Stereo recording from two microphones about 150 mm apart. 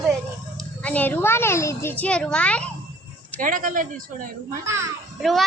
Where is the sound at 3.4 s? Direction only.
60° right (ahead or behind).